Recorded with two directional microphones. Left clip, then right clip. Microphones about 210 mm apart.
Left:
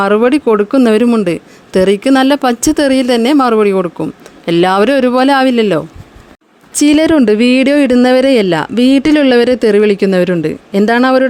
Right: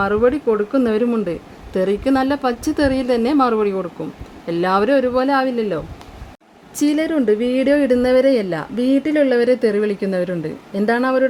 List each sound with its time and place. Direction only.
0.0 s speech: 35° left (ahead or behind)